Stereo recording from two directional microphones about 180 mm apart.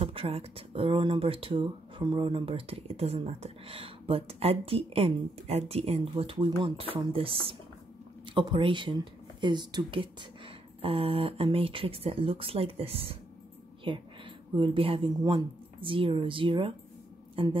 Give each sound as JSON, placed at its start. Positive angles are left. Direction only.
{"t": 0.0, "sound": "speech", "side_deg": -35}